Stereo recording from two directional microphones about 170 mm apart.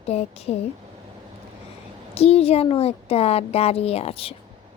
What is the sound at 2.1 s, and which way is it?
A child's voice, 35° left (ahead or behind).